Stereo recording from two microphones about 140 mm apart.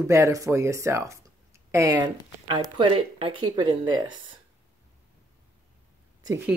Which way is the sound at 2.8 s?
40° right (ahead or behind).